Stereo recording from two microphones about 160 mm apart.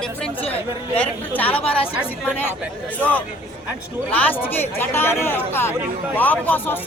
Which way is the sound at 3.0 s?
10° left (ahead or behind).